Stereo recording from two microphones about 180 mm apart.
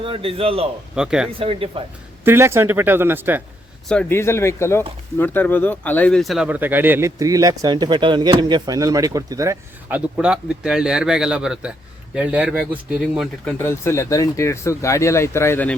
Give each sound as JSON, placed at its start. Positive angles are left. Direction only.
{"t": 0.0, "sound": "a man's voice", "side_deg": -30}
{"t": 0.9, "sound": "speech", "side_deg": -5}
{"t": 1.4, "sound": "speech", "side_deg": -30}
{"t": 2.2, "sound": "speech", "side_deg": -15}
{"t": 3.8, "sound": "speech", "side_deg": 10}
{"t": 13.4, "sound": "speech", "side_deg": 10}